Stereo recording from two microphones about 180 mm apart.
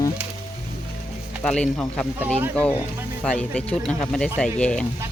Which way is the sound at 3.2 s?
5° left (ahead or behind).